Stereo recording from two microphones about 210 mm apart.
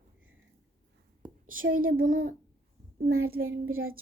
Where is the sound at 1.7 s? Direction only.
70° right (ahead or behind).